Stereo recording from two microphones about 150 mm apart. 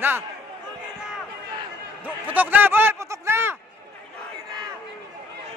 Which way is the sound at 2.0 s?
10° right (ahead or behind).